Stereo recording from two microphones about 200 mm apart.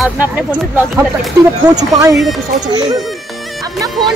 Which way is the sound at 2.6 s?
20° right (ahead or behind).